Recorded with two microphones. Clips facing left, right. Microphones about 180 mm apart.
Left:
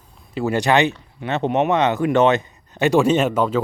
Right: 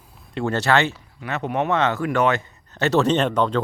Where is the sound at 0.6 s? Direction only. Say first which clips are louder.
Left 3 dB; 15° left (ahead or behind).